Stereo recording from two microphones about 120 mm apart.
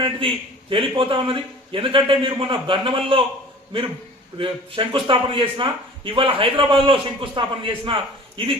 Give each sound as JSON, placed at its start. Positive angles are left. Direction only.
{"t": 0.0, "sound": "a man's voice", "side_deg": -45}
{"t": 4.4, "sound": "a man's voice", "side_deg": -45}